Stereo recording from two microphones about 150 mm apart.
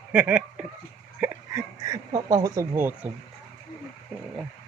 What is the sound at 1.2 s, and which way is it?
Speech, 25° right (ahead or behind).